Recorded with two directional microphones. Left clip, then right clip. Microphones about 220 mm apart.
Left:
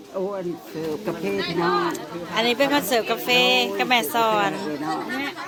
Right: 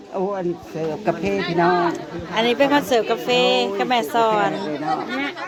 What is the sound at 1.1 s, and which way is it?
Speech, 40° right (ahead or behind).